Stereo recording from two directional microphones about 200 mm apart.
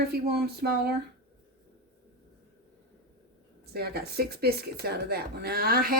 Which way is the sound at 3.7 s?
50° right (ahead or behind).